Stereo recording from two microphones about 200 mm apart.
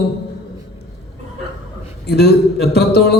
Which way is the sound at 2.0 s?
55° left (ahead or behind).